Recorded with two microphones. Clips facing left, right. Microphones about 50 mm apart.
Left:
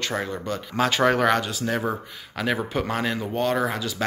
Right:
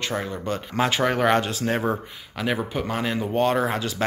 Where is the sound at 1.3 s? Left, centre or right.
Right.